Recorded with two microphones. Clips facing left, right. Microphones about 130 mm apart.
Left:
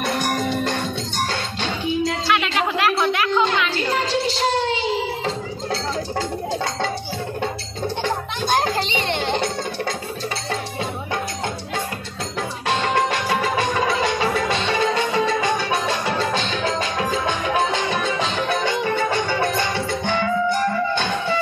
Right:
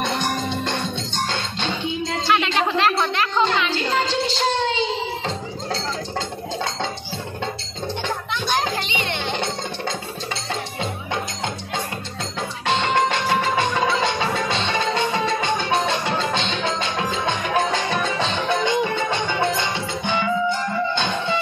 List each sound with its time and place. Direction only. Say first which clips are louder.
0.0 s music: left 1 dB; 25° right (ahead or behind)
2.2 s a sound: right 1 dB; 5° left (ahead or behind)
3.7 s music: even; 30° right (ahead or behind)
8.5 s children playing: left 4 dB; 35° left (ahead or behind)
12.6 s music: right 1 dB; 25° right (ahead or behind)